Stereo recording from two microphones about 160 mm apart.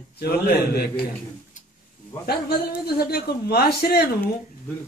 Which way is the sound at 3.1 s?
75° left (ahead or behind).